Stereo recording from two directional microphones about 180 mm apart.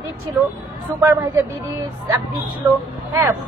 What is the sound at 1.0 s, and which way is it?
Speech, 20° right (ahead or behind).